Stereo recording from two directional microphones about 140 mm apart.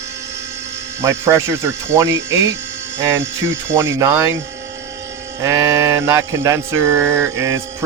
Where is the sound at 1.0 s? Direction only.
20° right (ahead or behind).